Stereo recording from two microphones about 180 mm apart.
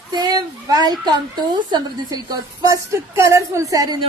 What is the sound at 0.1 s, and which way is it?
Speech, 25° right (ahead or behind).